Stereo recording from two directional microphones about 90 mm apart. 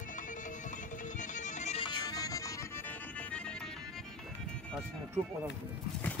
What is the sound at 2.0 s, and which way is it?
Music, 40° left (ahead or behind).